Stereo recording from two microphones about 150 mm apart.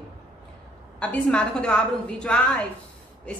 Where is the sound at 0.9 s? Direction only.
5° left (ahead or behind).